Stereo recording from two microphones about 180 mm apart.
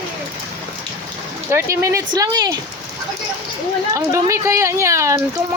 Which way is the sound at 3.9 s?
15° right (ahead or behind).